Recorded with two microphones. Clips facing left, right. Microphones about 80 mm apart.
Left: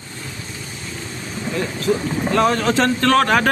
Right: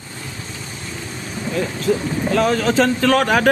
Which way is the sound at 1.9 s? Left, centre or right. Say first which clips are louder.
Even; centre.